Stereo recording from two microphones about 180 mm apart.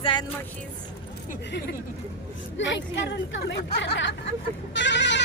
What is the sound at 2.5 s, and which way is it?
Speech, 90° left.